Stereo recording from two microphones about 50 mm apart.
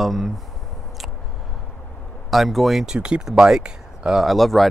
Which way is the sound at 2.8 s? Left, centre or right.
Centre.